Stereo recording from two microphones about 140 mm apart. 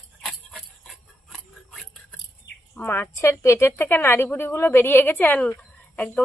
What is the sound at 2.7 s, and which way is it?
A woman's voice, 15° left (ahead or behind).